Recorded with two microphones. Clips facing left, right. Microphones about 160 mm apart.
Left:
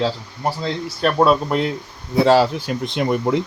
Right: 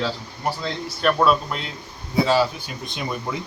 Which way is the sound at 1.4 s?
50° left (ahead or behind).